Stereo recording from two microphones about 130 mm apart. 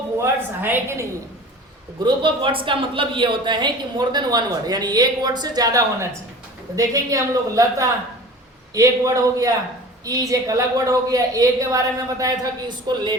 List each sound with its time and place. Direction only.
0.2 s a woman's voice: 20° right (ahead or behind)
2.0 s a woman's voice: 40° right (ahead or behind)